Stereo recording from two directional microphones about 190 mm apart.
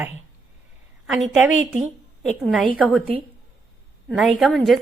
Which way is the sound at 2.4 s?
Centre (ahead or behind).